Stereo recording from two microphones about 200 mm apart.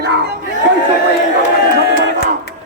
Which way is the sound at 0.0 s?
60° right (ahead or behind).